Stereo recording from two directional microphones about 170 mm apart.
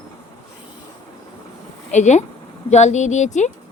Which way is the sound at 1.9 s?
45° left (ahead or behind).